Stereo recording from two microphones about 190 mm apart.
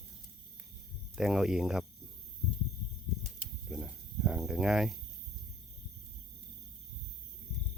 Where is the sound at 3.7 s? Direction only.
5° right (ahead or behind).